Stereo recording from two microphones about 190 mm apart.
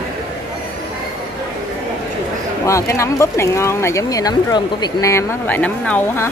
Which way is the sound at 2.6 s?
15° left (ahead or behind).